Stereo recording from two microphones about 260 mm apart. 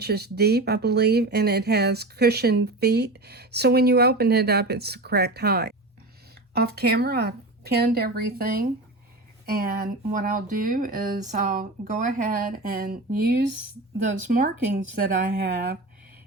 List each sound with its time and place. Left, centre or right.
0.0 s speech: right